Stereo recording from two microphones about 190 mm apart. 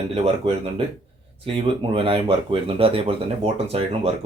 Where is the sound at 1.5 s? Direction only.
30° right (ahead or behind).